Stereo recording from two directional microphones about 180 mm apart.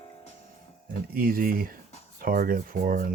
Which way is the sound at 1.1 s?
55° right (ahead or behind).